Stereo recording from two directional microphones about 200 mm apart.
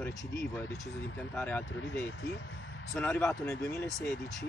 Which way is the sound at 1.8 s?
65° left (ahead or behind).